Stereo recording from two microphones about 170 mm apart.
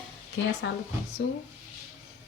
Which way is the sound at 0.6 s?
90° left.